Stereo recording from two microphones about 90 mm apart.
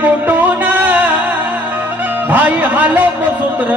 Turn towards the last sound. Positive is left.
turn(degrees=-20)  # may be behind; listen again after turning